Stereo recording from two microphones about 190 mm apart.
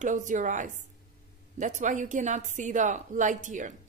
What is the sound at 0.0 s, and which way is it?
A woman's voice, 40° right (ahead or behind).